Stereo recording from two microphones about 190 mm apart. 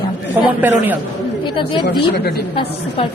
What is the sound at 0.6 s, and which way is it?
Speech, 10° right (ahead or behind).